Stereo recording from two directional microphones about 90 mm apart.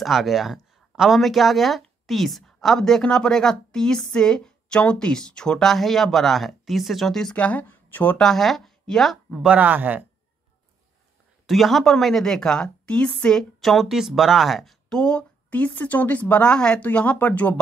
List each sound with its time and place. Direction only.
0.0 s speech: centre (ahead or behind)
7.3 s a woman's voice: 15° left (ahead or behind)
8.2 s speech: 5° left (ahead or behind)
9.4 s speech: 15° right (ahead or behind)
11.4 s a woman's voice: centre (ahead or behind); by 17.6 s 15° left (ahead or behind)